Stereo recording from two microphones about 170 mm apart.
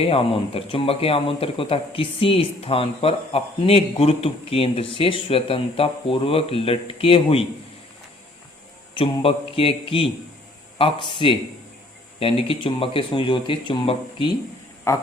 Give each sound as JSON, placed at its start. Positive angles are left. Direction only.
{"t": 0.0, "sound": "speech", "side_deg": 35}
{"t": 9.0, "sound": "speech", "side_deg": 35}
{"t": 14.9, "sound": "speech", "side_deg": 15}